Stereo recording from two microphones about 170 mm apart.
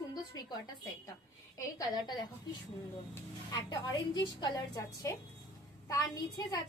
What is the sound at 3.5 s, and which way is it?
A woman's voice, 25° left (ahead or behind).